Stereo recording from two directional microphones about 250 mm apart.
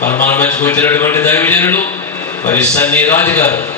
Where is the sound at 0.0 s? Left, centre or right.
Left.